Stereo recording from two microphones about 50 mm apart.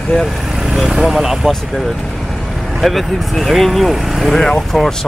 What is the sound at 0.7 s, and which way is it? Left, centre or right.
Speech, centre.